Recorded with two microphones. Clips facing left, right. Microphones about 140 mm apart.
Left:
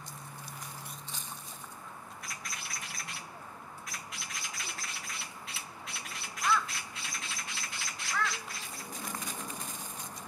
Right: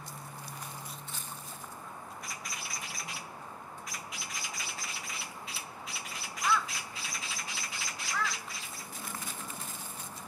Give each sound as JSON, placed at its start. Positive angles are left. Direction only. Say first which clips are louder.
{"t": 2.2, "sound": "bird", "louder": "right 1 dB", "side_deg": 0}
{"t": 8.9, "sound": "bird", "louder": "left 3 dB", "side_deg": 15}